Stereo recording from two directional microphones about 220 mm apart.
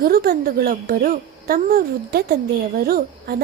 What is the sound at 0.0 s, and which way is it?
A woman's voice, 40° right (ahead or behind).